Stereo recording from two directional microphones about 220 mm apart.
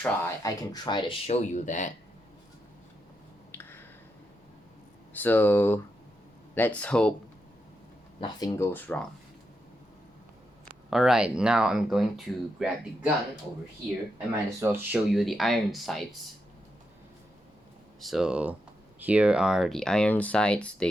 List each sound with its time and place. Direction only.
0.0 s speech: 15° left (ahead or behind); by 1.9 s 35° left (ahead or behind)
3.5 s a sound: 10° left (ahead or behind)
5.1 s speech: 10° left (ahead or behind)
8.2 s speech: 20° left (ahead or behind)
10.8 s speech: centre (ahead or behind)
14.6 s speech: 10° right (ahead or behind)
18.0 s speech: centre (ahead or behind)